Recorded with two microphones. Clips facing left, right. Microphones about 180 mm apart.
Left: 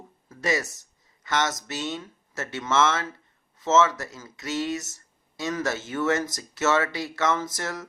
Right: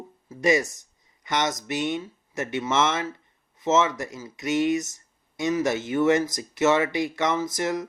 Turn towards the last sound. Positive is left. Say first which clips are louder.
# right 4 dB
turn(degrees=-15)  # may be behind; listen again after turning